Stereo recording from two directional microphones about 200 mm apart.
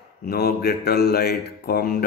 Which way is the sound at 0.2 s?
50° left (ahead or behind).